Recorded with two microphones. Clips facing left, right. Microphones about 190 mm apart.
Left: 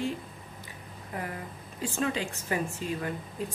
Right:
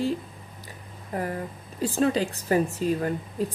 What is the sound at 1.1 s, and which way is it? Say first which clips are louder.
A woman's voice: right 7 dB; 40° right (ahead or behind).